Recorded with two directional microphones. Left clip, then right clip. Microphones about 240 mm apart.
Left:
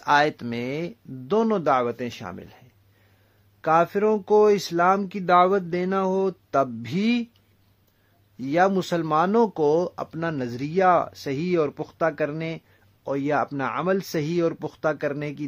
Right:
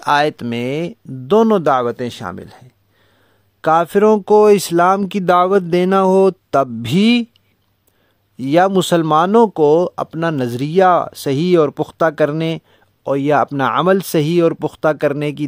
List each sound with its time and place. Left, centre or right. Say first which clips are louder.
0.0 s speech: right 5 dB; right
3.6 s speech: right 8 dB; right
8.4 s speech: right 8 dB; right